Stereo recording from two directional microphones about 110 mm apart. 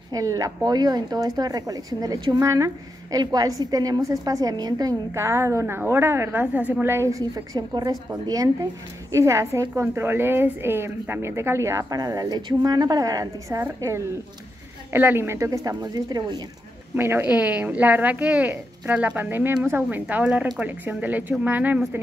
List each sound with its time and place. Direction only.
0.1 s a woman's voice: 30° right (ahead or behind)
16.9 s a woman's voice: 20° right (ahead or behind)